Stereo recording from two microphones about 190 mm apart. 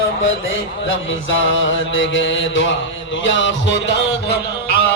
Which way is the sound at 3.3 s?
75° left (ahead or behind).